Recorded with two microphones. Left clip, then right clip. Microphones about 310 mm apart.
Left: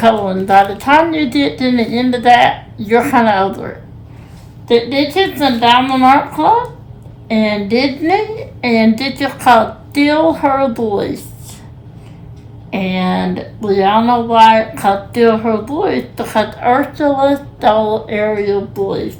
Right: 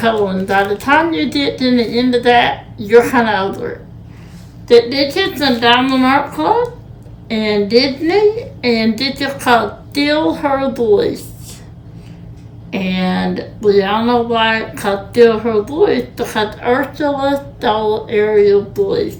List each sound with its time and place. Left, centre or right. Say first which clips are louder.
0.0 s speech: left 3 dB; centre
4.7 s speech: right 2 dB; centre
12.7 s speech: left 2 dB; centre